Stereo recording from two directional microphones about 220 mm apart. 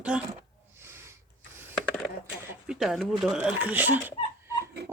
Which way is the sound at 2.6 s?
Centre (ahead or behind).